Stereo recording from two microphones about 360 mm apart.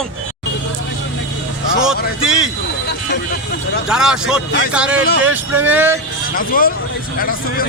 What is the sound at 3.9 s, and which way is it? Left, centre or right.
A man's voice, centre.